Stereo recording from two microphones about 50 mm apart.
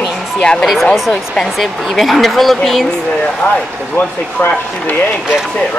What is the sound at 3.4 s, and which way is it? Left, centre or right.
Speech, left.